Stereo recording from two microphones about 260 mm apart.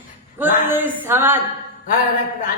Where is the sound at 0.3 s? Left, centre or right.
Centre.